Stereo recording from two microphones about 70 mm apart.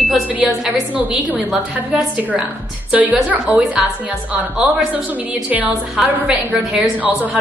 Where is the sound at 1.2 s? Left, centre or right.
Right.